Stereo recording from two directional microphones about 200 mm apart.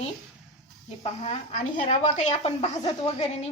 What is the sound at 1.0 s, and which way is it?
A woman's voice, 30° left (ahead or behind).